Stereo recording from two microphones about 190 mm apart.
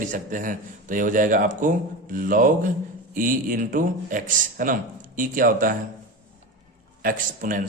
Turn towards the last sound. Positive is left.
turn(degrees=-50)  # may be behind; listen again after turning